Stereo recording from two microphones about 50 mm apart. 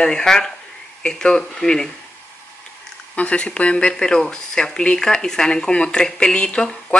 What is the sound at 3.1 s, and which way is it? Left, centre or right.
Speech, left.